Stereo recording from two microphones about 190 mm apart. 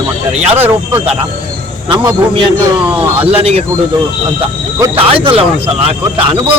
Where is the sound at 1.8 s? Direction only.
25° right (ahead or behind).